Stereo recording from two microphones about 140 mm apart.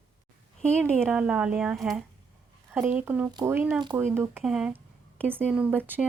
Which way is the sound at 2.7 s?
15° right (ahead or behind).